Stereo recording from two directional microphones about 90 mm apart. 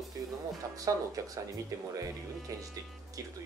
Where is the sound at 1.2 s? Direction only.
40° right (ahead or behind).